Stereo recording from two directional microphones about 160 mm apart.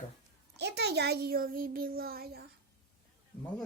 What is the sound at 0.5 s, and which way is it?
A child's voice, 90° right.